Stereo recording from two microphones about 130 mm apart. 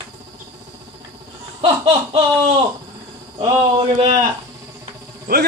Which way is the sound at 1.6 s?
45° right (ahead or behind).